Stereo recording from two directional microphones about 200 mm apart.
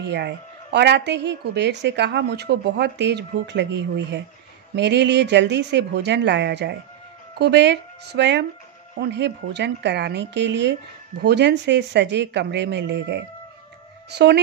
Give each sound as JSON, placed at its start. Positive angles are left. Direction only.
{"t": 0.0, "sound": "a woman's voice", "side_deg": -60}